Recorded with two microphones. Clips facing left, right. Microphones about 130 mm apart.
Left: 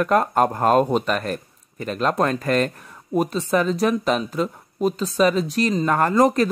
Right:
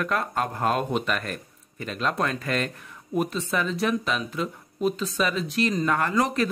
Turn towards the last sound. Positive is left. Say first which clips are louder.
# left 7 dB
turn(degrees=40)  # may be behind; listen again after turning